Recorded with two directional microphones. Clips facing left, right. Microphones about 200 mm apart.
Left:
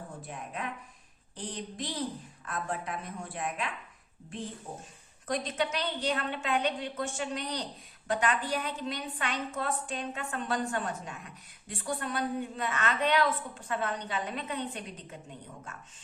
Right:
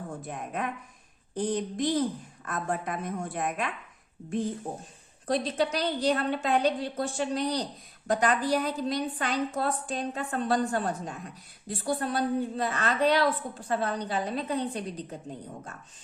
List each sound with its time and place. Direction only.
0.2 s a woman's voice: 50° right (ahead or behind)
5.3 s a woman's voice: 35° right (ahead or behind)